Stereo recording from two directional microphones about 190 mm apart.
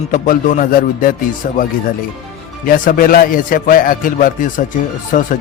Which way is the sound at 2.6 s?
45° left (ahead or behind).